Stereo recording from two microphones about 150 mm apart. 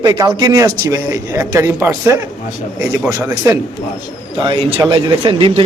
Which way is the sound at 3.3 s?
25° right (ahead or behind).